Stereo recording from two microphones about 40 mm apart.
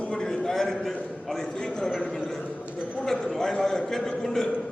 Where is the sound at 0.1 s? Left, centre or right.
Centre.